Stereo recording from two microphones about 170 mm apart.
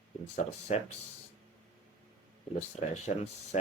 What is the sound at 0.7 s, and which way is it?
Speech, 40° left (ahead or behind).